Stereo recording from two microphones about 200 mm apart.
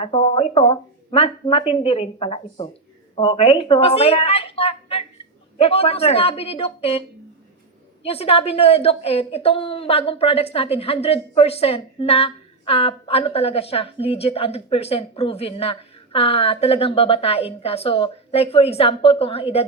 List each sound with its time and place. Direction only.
0.0 s a woman's voice: 30° left (ahead or behind)
8.0 s a woman's voice: 30° left (ahead or behind)